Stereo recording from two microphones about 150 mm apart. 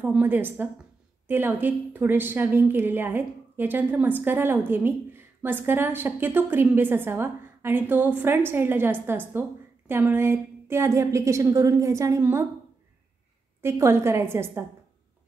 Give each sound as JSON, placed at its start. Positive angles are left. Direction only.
{"t": 0.0, "sound": "a woman's voice", "side_deg": -10}
{"t": 13.6, "sound": "a woman's voice", "side_deg": -15}